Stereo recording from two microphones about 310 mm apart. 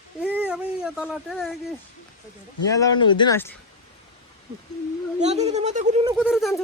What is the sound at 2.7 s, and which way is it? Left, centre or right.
Speech, centre.